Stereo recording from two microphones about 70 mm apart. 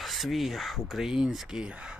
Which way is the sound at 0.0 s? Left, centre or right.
Centre.